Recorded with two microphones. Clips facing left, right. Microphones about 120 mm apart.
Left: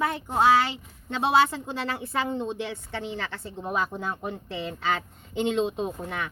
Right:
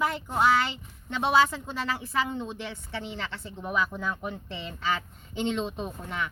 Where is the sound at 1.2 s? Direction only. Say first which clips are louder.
Left 1 dB; 25° left (ahead or behind).